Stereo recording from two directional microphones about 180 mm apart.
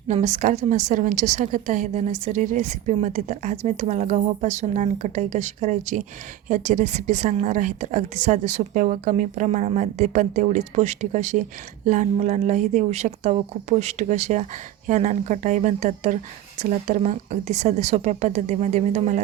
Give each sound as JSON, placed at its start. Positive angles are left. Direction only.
{"t": 0.1, "sound": "a woman's voice", "side_deg": -40}